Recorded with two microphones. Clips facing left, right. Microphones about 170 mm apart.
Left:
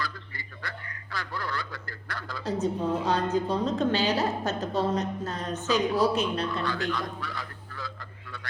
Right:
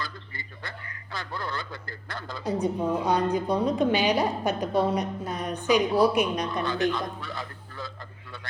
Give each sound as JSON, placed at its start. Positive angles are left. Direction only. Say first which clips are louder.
{"t": 0.0, "sound": "a sound", "louder": "left 1 dB", "side_deg": -25}
{"t": 1.1, "sound": "a man's voice", "louder": "even", "side_deg": -25}
{"t": 2.5, "sound": "a woman's voice", "louder": "right 1 dB", "side_deg": -10}